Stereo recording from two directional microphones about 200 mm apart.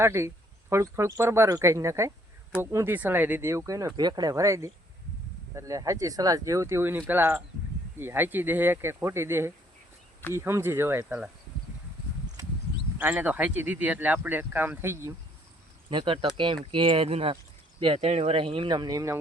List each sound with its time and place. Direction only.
0.0 s speech: 15° right (ahead or behind)
13.0 s speech: 10° right (ahead or behind)
15.9 s speech: 25° right (ahead or behind)